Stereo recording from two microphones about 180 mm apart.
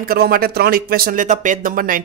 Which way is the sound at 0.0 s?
55° right (ahead or behind).